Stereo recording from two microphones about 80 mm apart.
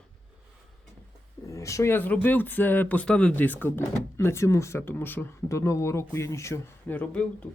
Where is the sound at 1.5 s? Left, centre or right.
Left.